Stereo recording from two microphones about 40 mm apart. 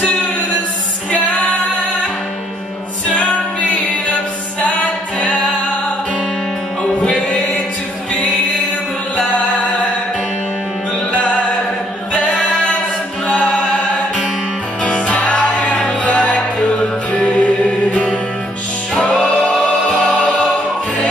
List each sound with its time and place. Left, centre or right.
5.2 s music: left
7.0 s music: left
11.1 s music: left
12.1 s a capella: left
13.3 s music: left
14.8 s music: left
19.6 s choir: left